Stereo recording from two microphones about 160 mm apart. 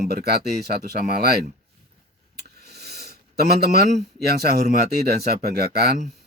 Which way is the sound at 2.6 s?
90° right.